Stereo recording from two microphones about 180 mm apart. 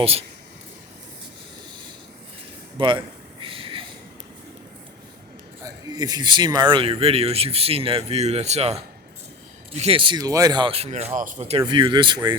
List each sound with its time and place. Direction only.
0.0 s speech: 35° right (ahead or behind)
2.7 s a man's voice: 25° right (ahead or behind)
3.4 s a sound: 30° right (ahead or behind)
5.6 s speech: 20° right (ahead or behind); by 11.6 s 40° right (ahead or behind)
11.6 s speech: 25° right (ahead or behind)